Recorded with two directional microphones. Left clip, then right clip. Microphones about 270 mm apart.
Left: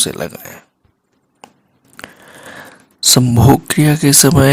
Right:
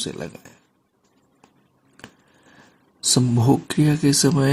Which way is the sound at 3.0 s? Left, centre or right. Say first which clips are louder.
Left 9 dB; left.